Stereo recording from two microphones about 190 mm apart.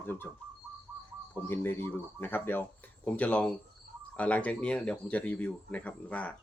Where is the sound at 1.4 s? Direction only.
10° left (ahead or behind).